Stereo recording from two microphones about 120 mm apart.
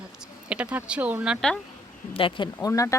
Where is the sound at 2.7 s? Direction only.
25° left (ahead or behind).